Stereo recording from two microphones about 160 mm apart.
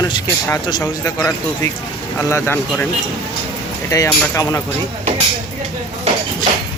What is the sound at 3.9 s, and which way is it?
Speech, 20° left (ahead or behind).